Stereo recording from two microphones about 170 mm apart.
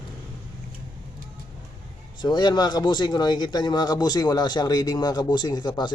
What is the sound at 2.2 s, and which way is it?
Speech, 25° left (ahead or behind).